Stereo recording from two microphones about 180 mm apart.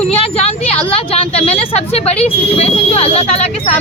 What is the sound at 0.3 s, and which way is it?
Speech, 35° left (ahead or behind).